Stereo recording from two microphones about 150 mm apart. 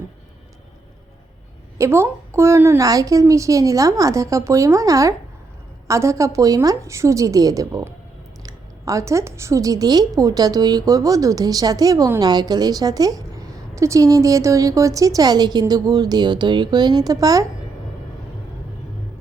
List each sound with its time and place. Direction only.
1.8 s a woman's voice: 15° right (ahead or behind)